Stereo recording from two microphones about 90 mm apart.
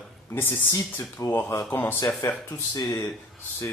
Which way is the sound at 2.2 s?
40° left (ahead or behind).